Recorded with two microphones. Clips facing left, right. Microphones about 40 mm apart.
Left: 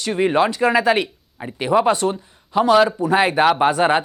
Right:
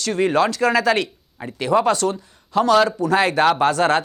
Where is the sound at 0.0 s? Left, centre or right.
Centre.